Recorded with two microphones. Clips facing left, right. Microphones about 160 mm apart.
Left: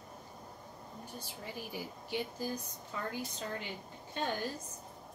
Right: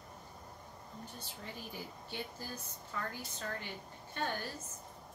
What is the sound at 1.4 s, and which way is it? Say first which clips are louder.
Speech: left 3 dB; 10° left (ahead or behind).